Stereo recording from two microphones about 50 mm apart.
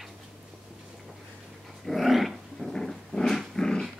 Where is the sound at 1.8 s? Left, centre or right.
Centre.